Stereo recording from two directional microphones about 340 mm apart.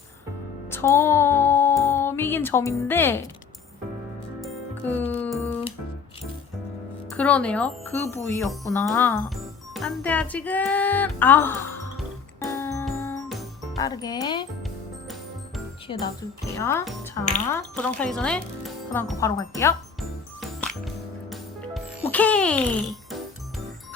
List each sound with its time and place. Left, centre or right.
0.7 s speech: centre
4.4 s music: centre
7.1 s speech: centre
11.9 s music: centre
13.7 s speech: centre
14.6 s music: centre
15.9 s speech: centre
17.3 s music: centre